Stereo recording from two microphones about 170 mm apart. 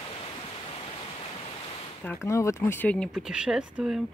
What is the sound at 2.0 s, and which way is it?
Speech, 15° left (ahead or behind).